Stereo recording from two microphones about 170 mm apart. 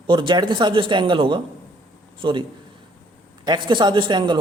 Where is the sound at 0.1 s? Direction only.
25° right (ahead or behind).